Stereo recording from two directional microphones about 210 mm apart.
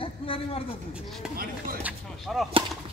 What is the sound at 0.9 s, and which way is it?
Speech, centre (ahead or behind).